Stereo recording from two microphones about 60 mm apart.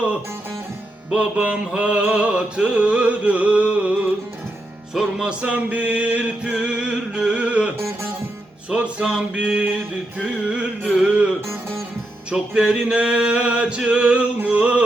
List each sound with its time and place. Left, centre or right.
1.1 s music: centre
7.8 s music: right
8.7 s a sound: centre
10.2 s music: centre
11.3 s music: right
12.3 s music: centre